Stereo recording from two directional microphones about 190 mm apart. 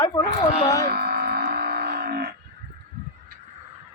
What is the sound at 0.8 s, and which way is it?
Music, 55° right (ahead or behind).